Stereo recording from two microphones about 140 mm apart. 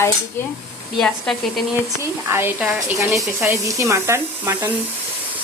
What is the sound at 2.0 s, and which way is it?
Speech, 15° right (ahead or behind).